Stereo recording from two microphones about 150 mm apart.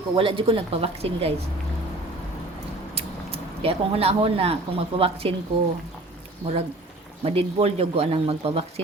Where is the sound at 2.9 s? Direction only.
40° right (ahead or behind).